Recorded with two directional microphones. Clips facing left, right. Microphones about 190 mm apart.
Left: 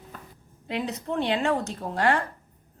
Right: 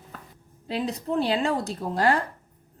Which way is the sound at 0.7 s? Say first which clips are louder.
Right 2 dB; 35° right (ahead or behind).